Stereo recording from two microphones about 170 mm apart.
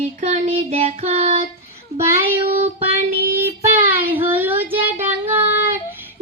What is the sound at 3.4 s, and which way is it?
Child singing, 10° right (ahead or behind).